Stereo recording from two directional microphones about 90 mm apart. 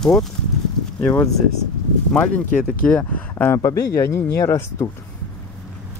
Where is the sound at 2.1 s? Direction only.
15° left (ahead or behind).